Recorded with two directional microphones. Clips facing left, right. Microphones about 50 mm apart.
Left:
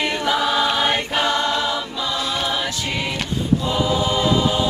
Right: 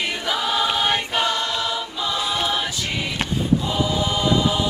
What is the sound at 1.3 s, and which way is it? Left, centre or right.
Music, left.